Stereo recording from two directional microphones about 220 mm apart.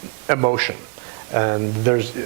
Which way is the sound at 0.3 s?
15° right (ahead or behind).